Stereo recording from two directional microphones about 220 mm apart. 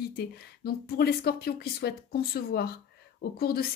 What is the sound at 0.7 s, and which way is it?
Speech, 45° left (ahead or behind).